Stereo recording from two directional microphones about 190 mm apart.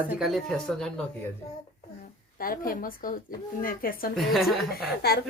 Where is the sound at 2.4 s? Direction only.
50° left (ahead or behind).